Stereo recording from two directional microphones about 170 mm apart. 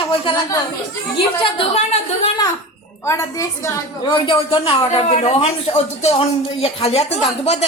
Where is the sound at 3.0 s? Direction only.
15° left (ahead or behind).